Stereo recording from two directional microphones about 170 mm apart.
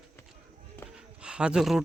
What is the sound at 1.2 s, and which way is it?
Speech, 5° right (ahead or behind).